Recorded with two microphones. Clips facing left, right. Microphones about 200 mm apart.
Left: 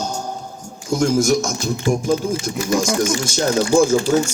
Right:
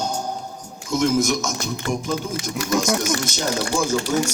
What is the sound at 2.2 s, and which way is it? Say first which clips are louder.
Speech: left 6 dB; 30° left (ahead or behind).